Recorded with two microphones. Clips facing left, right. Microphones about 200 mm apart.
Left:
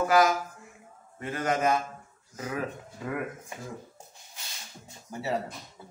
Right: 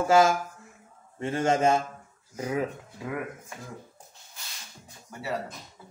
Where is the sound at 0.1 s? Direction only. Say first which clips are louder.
Right 5 dB; 25° right (ahead or behind).